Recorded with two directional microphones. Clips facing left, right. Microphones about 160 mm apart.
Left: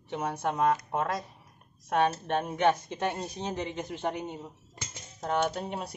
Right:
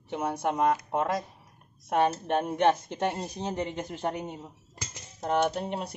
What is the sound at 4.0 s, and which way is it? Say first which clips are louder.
Speech: right 1 dB; 5° right (ahead or behind).